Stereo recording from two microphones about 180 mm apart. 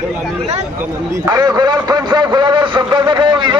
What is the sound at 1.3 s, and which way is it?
A man's voice, 20° right (ahead or behind).